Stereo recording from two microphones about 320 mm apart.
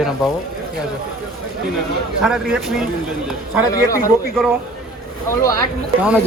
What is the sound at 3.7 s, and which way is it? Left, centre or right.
A man's voice, centre.